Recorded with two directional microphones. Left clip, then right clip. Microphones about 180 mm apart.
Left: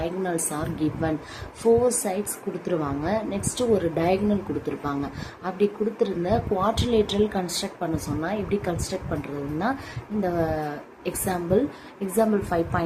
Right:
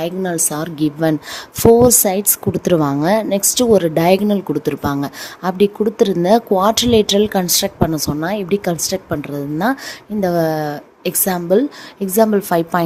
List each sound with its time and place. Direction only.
0.0 s a woman's voice: 55° right (ahead or behind)
1.8 s a woman's voice: 70° right (ahead or behind)
10.2 s a woman's voice: 60° right (ahead or behind)